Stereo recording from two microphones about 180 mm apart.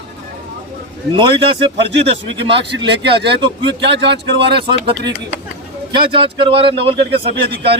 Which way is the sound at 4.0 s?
70° right (ahead or behind).